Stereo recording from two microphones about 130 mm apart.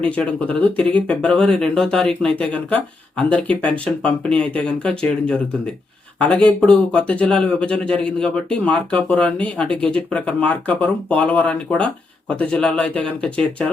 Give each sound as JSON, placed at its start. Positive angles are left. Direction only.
{"t": 0.0, "sound": "speech", "side_deg": 10}